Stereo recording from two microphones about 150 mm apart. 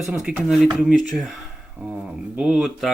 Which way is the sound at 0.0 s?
5° right (ahead or behind).